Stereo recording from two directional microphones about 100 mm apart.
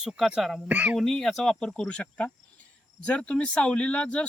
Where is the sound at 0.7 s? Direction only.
15° right (ahead or behind).